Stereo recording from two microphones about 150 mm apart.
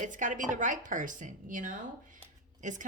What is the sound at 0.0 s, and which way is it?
A woman's voice, 60° right (ahead or behind).